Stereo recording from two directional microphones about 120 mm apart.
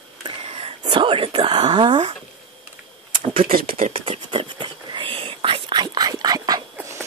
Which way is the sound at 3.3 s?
55° right (ahead or behind).